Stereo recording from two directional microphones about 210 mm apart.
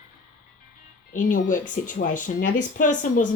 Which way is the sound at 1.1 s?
40° left (ahead or behind).